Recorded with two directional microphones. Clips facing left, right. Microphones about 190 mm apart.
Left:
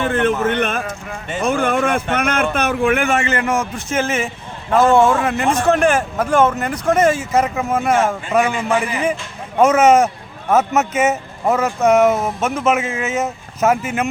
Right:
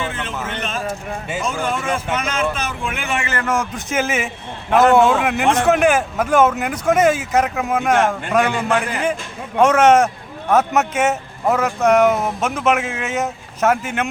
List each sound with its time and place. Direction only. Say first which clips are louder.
0.0 s a man's voice: left 9 dB; 60° left (ahead or behind)
3.4 s speech: left 1 dB; 5° left (ahead or behind)